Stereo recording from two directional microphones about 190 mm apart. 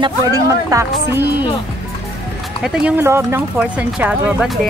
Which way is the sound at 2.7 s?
10° right (ahead or behind).